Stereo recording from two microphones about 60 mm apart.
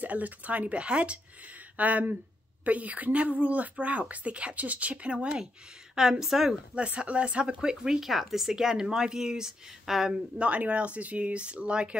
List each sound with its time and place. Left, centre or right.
0.0 s speech: right; by 6.5 s centre
6.7 s speech: centre
10.4 s speech: right